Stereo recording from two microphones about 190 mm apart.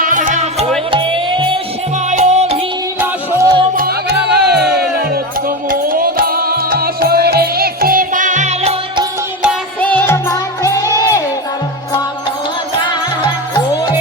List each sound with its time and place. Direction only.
0.0 s music: 45° right (ahead or behind)
0.9 s music: 25° right (ahead or behind)
2.0 s music: 40° right (ahead or behind)
3.0 s music: 15° right (ahead or behind)
4.4 s music: 60° right (ahead or behind); by 8.7 s 35° right (ahead or behind)
9.8 s music: 10° left (ahead or behind)